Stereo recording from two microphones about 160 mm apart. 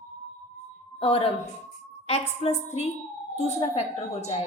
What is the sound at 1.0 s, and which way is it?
A woman's voice, 35° left (ahead or behind).